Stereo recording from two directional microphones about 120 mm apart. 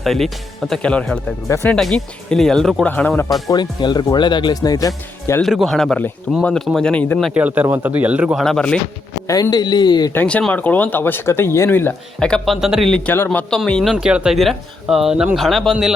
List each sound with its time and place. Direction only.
0.0 s speech: centre (ahead or behind)
1.5 s speech: 20° left (ahead or behind)
1.7 s speech: 5° left (ahead or behind)
3.5 s speech: 40° left (ahead or behind)
5.4 s speech: centre (ahead or behind)
7.3 s speech: 15° right (ahead or behind)
8.4 s speech: 5° left (ahead or behind)
9.2 s speech: 30° left (ahead or behind)
10.1 s speech: 15° left (ahead or behind)
12.3 s speech: centre (ahead or behind)
13.1 s speech: 15° left (ahead or behind); by 15.9 s centre (ahead or behind)